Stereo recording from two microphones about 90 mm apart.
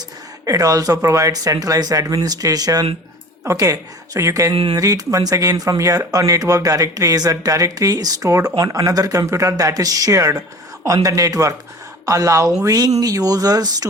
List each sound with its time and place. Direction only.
0.4 s speech: 40° right (ahead or behind)
4.5 s speech: 90° right
4.8 s speech: 40° right (ahead or behind)